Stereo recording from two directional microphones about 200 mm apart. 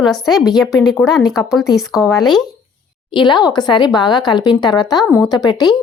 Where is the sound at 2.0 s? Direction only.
15° left (ahead or behind).